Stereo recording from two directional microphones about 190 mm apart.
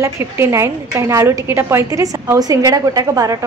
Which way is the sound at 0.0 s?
15° right (ahead or behind).